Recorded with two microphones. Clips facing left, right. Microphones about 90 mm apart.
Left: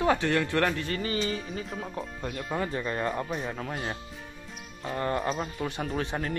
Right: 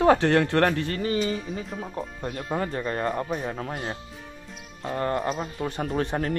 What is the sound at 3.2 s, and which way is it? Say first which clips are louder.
Speech: right 3 dB; 15° right (ahead or behind).